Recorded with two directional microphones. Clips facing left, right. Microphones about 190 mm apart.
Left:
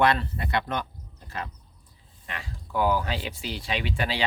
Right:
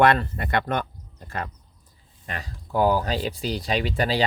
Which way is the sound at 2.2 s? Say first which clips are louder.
Right 3 dB; 40° right (ahead or behind).